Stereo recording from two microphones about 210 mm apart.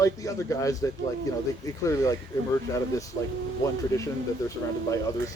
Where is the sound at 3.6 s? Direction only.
15° left (ahead or behind).